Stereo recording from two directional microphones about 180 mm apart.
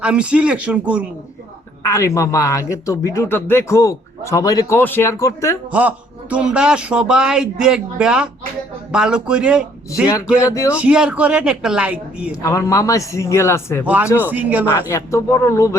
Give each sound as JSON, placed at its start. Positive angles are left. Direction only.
{"t": 0.0, "sound": "a woman's voice", "side_deg": -5}
{"t": 1.8, "sound": "speech", "side_deg": 15}
{"t": 6.3, "sound": "speech", "side_deg": -5}
{"t": 10.5, "sound": "speech", "side_deg": 15}
{"t": 10.8, "sound": "a woman's voice", "side_deg": -5}
{"t": 12.4, "sound": "speech", "side_deg": 15}
{"t": 13.8, "sound": "a woman's voice", "side_deg": -10}
{"t": 14.8, "sound": "speech", "side_deg": 15}